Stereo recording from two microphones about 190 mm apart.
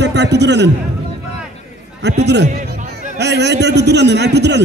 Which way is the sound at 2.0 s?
65° right (ahead or behind).